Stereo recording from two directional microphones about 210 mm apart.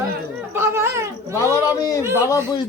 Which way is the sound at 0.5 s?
10° right (ahead or behind).